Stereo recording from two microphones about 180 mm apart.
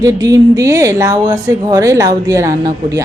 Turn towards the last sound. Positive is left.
turn(degrees=-15)  # may be behind; listen again after turning